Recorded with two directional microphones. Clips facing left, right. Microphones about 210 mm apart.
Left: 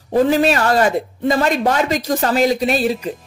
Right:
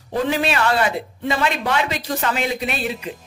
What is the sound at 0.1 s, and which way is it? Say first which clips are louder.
A woman's voice: left 7 dB; 40° left (ahead or behind).